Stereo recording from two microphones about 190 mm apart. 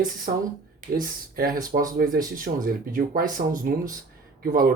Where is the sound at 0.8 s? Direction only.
45° right (ahead or behind).